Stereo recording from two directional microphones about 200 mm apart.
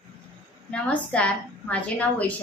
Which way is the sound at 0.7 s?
5° left (ahead or behind).